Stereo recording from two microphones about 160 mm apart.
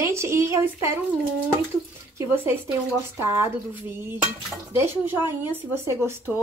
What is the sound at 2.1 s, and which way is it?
Speech, 15° right (ahead or behind).